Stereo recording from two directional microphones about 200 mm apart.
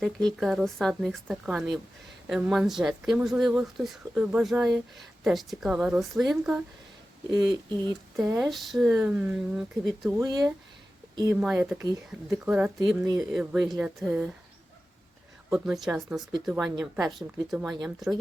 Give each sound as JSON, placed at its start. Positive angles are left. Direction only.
{"t": 0.0, "sound": "speech", "side_deg": 0}
{"t": 8.1, "sound": "speech", "side_deg": 0}
{"t": 11.1, "sound": "speech", "side_deg": -20}
{"t": 11.3, "sound": "speech", "side_deg": -5}
{"t": 15.4, "sound": "speech", "side_deg": -5}